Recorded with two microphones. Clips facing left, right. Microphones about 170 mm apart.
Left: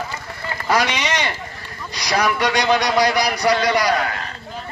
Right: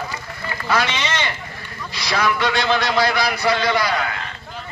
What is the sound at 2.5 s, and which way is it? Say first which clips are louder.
Speech: left 2 dB; 15° left (ahead or behind).